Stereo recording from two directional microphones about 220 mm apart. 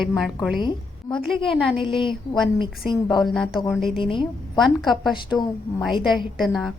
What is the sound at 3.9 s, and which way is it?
Speech, 20° left (ahead or behind).